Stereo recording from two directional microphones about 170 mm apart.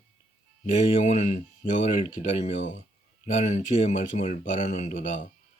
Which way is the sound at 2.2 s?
35° left (ahead or behind).